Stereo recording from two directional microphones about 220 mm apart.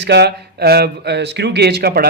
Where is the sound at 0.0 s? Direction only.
50° right (ahead or behind).